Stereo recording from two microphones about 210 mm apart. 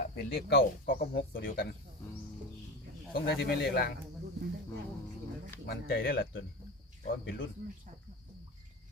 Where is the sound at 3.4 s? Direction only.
50° left (ahead or behind).